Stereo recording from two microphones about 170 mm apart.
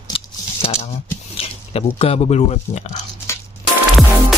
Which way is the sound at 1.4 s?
35° left (ahead or behind).